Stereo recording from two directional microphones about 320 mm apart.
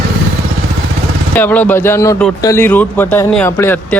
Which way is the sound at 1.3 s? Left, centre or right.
Centre.